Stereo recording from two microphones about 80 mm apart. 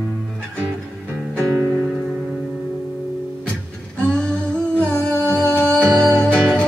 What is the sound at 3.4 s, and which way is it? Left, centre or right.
Humming, centre.